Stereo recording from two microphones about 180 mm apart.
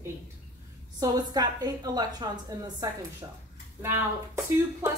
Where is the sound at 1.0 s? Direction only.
20° right (ahead or behind).